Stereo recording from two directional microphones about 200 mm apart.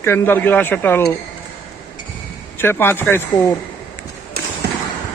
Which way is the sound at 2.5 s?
10° left (ahead or behind).